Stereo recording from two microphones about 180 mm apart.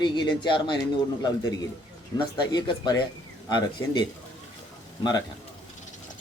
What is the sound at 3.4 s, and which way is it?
Speech, 25° left (ahead or behind).